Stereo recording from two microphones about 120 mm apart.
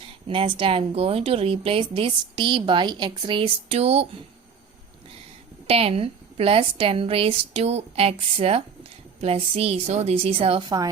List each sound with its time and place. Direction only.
0.3 s speech: 45° right (ahead or behind)
5.6 s a woman's voice: 55° right (ahead or behind)